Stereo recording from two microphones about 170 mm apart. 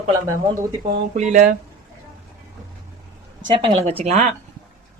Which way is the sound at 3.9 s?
40° right (ahead or behind).